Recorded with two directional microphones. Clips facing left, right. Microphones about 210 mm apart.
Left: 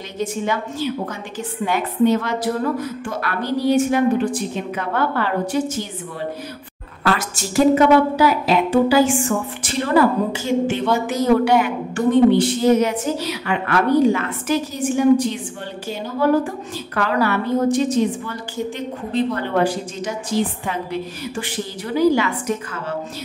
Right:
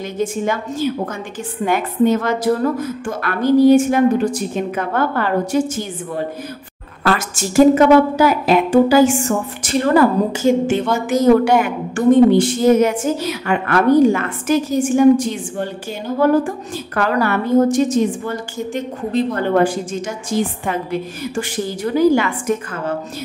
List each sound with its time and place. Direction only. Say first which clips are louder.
0.2 s a woman's voice: right 2 dB; 45° right (ahead or behind)
7.2 s a woman's voice: right 8 dB; 45° right (ahead or behind)
21.9 s a woman's voice: right 2 dB; 50° right (ahead or behind)